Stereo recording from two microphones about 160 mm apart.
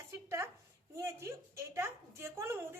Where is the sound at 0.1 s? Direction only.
15° right (ahead or behind).